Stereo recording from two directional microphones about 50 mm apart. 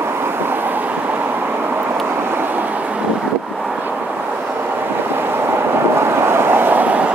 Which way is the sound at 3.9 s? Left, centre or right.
Right.